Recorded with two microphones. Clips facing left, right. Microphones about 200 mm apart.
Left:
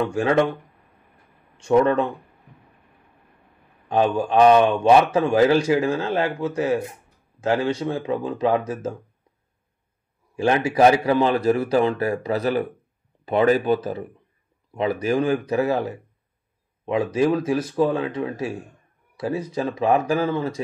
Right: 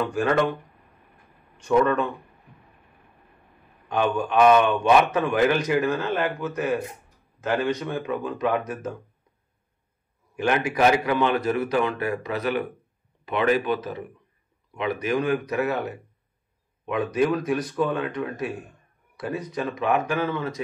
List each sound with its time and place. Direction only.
1.7 s speech: 25° left (ahead or behind)
3.9 s speech: 30° left (ahead or behind)
10.3 s speech: 30° left (ahead or behind)